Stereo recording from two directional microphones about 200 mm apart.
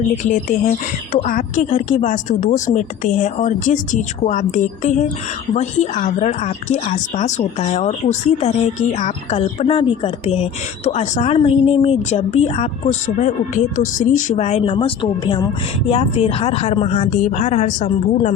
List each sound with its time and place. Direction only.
0.2 s a woman's voice: 40° left (ahead or behind)